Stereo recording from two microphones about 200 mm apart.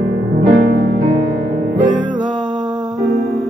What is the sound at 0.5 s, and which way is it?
Music, 40° right (ahead or behind).